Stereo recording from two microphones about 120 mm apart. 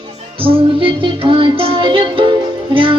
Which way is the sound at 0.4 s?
45° right (ahead or behind).